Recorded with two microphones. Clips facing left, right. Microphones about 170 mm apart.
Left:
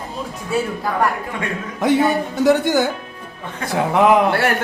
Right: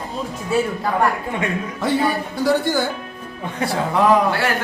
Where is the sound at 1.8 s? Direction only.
20° left (ahead or behind).